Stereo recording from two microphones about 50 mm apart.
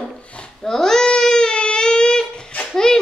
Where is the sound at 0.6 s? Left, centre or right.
Centre.